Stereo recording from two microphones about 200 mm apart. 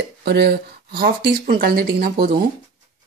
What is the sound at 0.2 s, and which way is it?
Speech, 55° right (ahead or behind).